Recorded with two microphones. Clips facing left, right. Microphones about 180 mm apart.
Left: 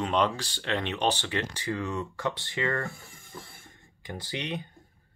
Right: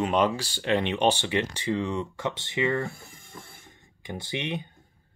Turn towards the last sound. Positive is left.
turn(degrees=-20)  # may be behind; listen again after turning